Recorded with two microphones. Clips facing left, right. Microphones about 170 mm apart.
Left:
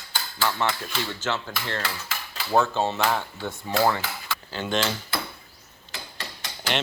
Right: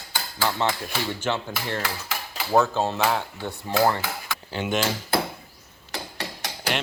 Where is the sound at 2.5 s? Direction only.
5° right (ahead or behind).